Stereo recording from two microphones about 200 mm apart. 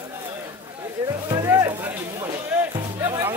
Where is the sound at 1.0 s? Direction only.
15° right (ahead or behind).